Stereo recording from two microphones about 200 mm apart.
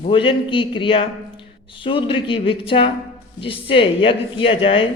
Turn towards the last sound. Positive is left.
turn(degrees=25)  # may be behind; listen again after turning